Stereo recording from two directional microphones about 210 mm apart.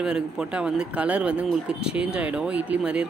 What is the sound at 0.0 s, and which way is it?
Speech, 5° right (ahead or behind).